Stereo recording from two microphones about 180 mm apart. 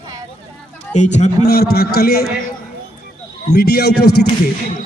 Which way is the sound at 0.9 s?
40° left (ahead or behind).